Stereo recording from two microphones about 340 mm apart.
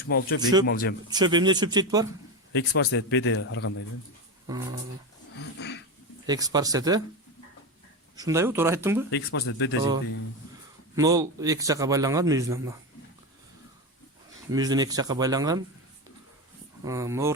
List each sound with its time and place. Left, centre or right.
0.1 s speech: left
1.1 s a man's voice: centre
2.5 s a man's voice: left
4.5 s a man's voice: centre
5.5 s a sound: left
6.2 s a man's voice: centre
8.1 s a man's voice: centre
9.0 s a man's voice: left
10.9 s a man's voice: centre
14.5 s a man's voice: centre
16.8 s a man's voice: centre